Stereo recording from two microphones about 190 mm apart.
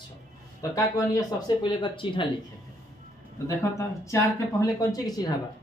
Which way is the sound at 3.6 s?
15° left (ahead or behind).